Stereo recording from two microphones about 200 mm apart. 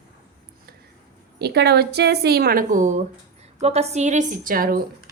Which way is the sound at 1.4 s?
55° right (ahead or behind).